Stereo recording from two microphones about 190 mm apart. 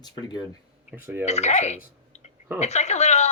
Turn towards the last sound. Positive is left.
turn(degrees=35)  # may be behind; listen again after turning